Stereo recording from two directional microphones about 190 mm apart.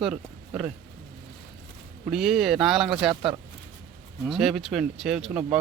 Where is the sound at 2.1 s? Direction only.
Centre (ahead or behind).